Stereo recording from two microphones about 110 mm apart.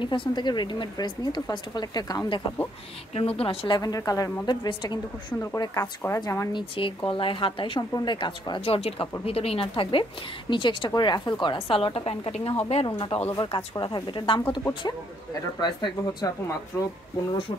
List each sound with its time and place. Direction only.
0.0 s speech: 50° left (ahead or behind)
3.2 s speech: 60° left (ahead or behind); by 5.0 s 40° left (ahead or behind)
5.4 s a woman's voice: 30° left (ahead or behind)
6.8 s speech: 50° left (ahead or behind)
8.5 s a woman's voice: 65° left (ahead or behind)
12.8 s speech: 40° left (ahead or behind)